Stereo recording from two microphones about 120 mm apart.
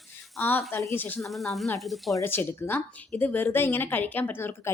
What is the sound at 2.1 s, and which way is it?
Speech, 15° left (ahead or behind).